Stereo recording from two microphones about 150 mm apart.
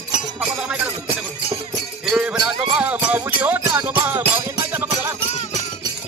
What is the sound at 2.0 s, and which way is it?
Music, 5° right (ahead or behind).